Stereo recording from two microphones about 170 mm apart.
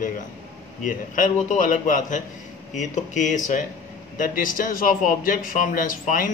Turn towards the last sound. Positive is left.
turn(degrees=50)  # may be behind; listen again after turning